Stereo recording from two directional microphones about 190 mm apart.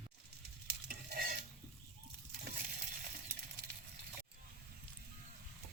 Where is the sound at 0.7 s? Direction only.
55° right (ahead or behind).